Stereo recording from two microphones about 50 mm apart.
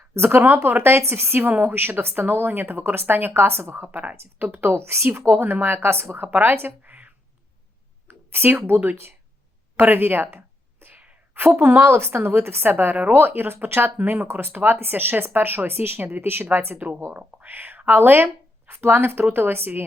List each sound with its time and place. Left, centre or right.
0.1 s a woman's voice: right
3.4 s a woman's voice: right
5.3 s a woman's voice: right
8.0 s speech: right
9.7 s a sound: right
11.3 s a woman's voice: right